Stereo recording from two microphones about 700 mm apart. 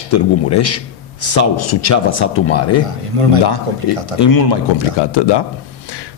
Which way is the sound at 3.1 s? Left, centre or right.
Right.